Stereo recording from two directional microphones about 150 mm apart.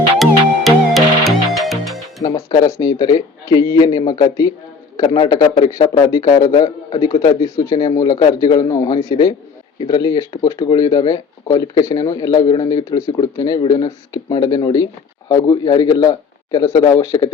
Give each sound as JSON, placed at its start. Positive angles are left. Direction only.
{"t": 0.2, "sound": "music", "side_deg": 0}
{"t": 2.2, "sound": "a man's voice", "side_deg": 25}